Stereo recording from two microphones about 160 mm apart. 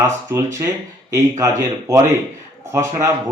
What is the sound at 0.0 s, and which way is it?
Speech, 20° right (ahead or behind).